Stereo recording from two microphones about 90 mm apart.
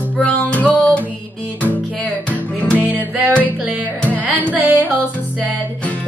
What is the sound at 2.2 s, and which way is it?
Music, 15° left (ahead or behind).